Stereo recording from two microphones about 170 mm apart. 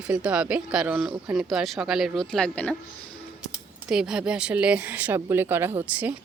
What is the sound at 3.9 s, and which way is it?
Speech, 5° right (ahead or behind).